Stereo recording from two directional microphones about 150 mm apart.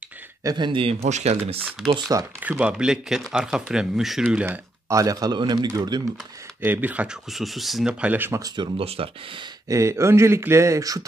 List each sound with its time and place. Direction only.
0.4 s speech: 25° right (ahead or behind)
1.0 s speech: 50° right (ahead or behind)
2.0 s speech: 20° right (ahead or behind)
2.4 s speech: 10° right (ahead or behind)
4.8 s speech: 20° right (ahead or behind)
6.6 s speech: 10° right (ahead or behind)
8.7 s speech: 40° right (ahead or behind)
9.7 s speech: 20° right (ahead or behind)